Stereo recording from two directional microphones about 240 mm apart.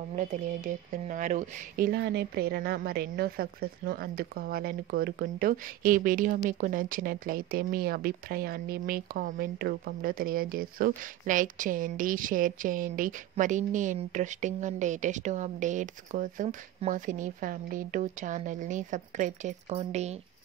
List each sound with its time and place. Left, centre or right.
0.1 s speech: right